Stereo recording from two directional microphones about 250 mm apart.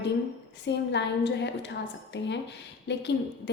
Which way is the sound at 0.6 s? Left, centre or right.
Left.